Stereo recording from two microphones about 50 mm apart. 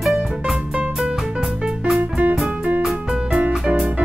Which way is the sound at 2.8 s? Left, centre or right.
Centre.